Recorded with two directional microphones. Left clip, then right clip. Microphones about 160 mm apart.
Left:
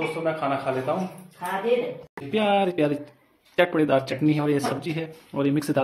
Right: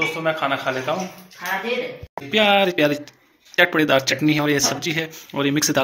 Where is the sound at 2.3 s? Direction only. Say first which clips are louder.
Right 6 dB; centre (ahead or behind).